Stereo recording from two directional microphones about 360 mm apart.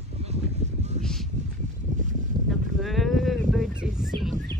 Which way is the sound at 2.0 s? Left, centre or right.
Right.